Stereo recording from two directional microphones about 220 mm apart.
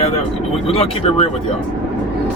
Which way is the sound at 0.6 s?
25° left (ahead or behind).